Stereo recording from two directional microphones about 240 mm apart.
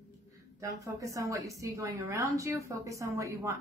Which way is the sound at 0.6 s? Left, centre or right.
Centre.